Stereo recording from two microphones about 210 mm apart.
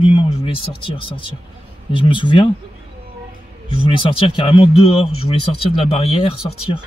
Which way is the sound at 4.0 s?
25° left (ahead or behind).